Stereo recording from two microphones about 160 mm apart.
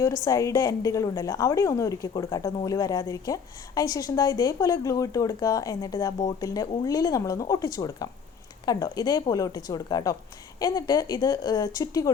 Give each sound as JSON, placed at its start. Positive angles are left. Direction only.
{"t": 0.0, "sound": "a woman's voice", "side_deg": 20}